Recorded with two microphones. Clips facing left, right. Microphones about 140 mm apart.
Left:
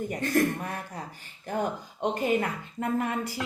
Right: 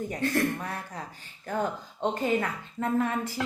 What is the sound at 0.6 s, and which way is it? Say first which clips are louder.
Speech: left 1 dB; 10° left (ahead or behind).